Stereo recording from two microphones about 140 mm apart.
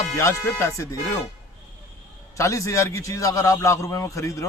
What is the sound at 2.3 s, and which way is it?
A man's voice, 20° left (ahead or behind).